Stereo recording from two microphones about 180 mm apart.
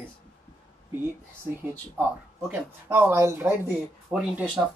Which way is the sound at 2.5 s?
10° right (ahead or behind).